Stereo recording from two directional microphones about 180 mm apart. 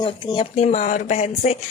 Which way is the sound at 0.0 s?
25° left (ahead or behind).